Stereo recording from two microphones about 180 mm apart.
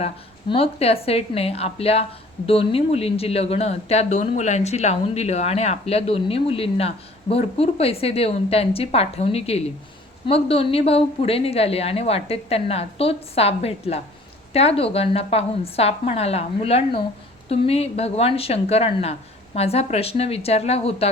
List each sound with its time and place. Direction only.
0.0 s speech: 30° left (ahead or behind)